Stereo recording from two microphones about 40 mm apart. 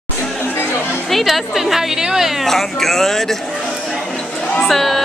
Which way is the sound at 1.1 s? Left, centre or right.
Centre.